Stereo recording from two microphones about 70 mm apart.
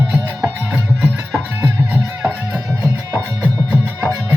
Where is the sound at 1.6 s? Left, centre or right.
Right.